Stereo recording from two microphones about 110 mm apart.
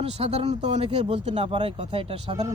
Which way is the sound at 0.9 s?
55° right (ahead or behind).